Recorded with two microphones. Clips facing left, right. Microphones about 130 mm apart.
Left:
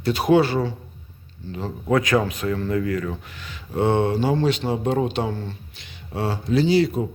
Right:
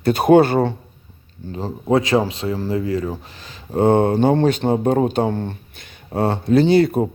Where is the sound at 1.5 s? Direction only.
40° right (ahead or behind).